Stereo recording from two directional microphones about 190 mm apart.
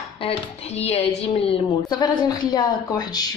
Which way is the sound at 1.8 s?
20° left (ahead or behind).